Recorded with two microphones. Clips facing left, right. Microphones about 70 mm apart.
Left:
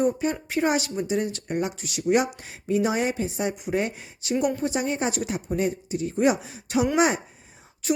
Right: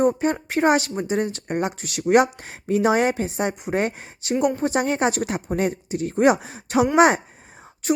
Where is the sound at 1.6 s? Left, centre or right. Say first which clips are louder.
Right 2 dB; right.